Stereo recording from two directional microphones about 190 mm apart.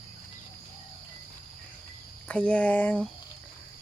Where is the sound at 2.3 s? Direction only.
5° left (ahead or behind).